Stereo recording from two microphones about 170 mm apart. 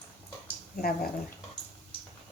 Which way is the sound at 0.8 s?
60° left (ahead or behind).